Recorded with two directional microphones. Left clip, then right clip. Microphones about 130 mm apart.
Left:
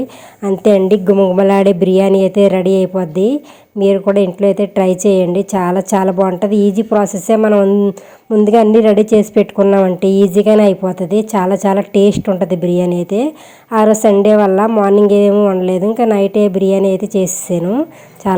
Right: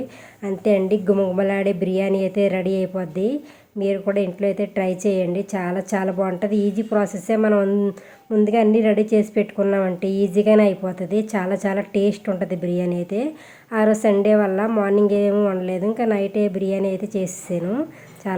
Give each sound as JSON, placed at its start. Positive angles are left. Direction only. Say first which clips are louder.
{"t": 0.4, "sound": "speech", "louder": "left 9 dB", "side_deg": 50}
{"t": 8.4, "sound": "speech", "louder": "left 9 dB", "side_deg": 45}
{"t": 18.3, "sound": "speech", "louder": "left 12 dB", "side_deg": 45}